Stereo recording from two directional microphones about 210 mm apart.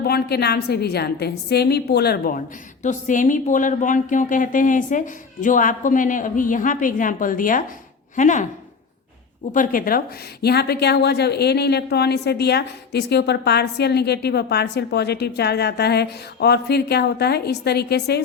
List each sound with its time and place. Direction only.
0.0 s speech: 50° left (ahead or behind)
9.5 s speech: 40° left (ahead or behind)